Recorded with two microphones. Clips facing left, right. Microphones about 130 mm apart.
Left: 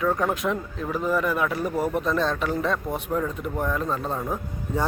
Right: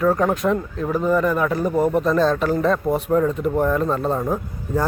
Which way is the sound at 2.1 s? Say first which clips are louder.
Right 6 dB; 35° right (ahead or behind).